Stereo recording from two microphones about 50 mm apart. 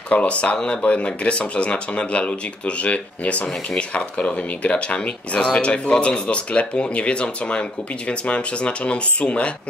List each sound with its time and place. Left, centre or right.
0.1 s speech: left